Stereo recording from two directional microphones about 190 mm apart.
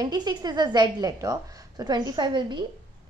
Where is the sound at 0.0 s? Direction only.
20° right (ahead or behind).